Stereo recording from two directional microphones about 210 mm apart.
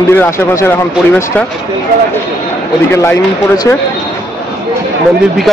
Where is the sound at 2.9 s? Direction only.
10° left (ahead or behind).